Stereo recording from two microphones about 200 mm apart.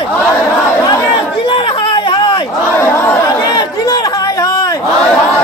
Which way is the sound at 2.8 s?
10° left (ahead or behind).